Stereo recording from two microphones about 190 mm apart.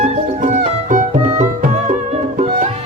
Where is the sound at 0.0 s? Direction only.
40° right (ahead or behind).